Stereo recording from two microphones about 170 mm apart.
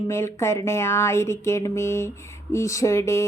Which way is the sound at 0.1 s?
15° left (ahead or behind).